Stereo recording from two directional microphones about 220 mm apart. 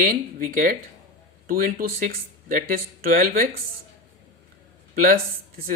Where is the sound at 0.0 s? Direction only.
40° right (ahead or behind).